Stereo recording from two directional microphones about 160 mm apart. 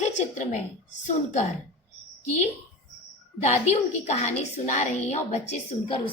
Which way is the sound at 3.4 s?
45° left (ahead or behind).